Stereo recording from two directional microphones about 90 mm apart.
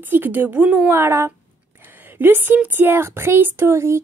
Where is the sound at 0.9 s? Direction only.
30° right (ahead or behind).